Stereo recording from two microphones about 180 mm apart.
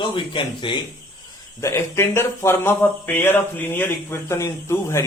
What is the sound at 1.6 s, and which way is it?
Speech, 15° left (ahead or behind).